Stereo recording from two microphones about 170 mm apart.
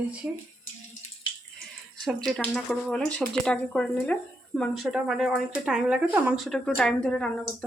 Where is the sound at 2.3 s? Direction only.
Centre (ahead or behind).